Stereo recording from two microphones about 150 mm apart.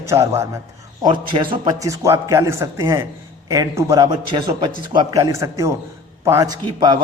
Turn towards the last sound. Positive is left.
turn(degrees=-25)  # may be behind; listen again after turning